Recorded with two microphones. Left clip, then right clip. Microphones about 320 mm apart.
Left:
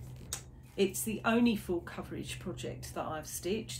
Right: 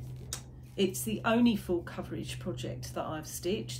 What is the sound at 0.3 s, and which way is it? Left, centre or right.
Speech, centre.